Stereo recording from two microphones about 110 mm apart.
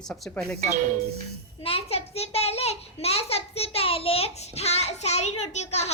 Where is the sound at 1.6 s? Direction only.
65° left (ahead or behind).